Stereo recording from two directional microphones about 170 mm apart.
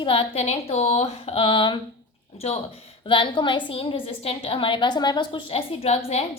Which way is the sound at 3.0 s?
30° left (ahead or behind).